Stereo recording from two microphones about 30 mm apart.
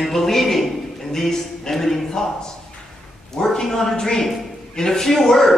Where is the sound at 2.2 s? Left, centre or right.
Left.